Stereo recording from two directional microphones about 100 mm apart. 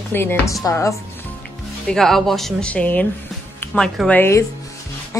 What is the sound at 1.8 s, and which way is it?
Speech, 5° left (ahead or behind).